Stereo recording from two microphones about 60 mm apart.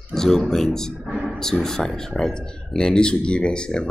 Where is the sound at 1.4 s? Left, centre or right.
Centre.